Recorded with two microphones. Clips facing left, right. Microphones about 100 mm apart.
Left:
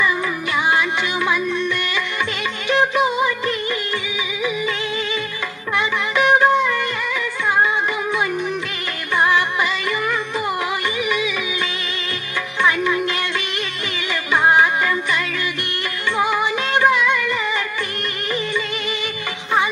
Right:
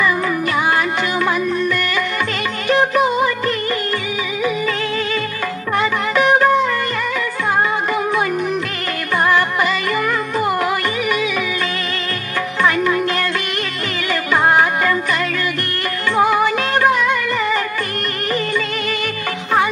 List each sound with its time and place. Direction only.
0.7 s music: 45° right (ahead or behind)
2.7 s music: 45° right (ahead or behind)
5.8 s music: 45° right (ahead or behind)
12.6 s music: 45° right (ahead or behind)
14.3 s music: 45° right (ahead or behind)